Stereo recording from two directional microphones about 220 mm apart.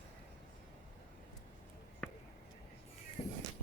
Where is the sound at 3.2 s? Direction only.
25° left (ahead or behind).